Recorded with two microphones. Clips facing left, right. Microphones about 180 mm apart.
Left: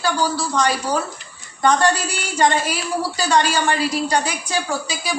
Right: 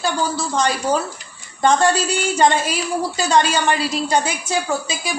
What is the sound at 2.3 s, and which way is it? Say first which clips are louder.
A woman's voice: even; 25° right (ahead or behind).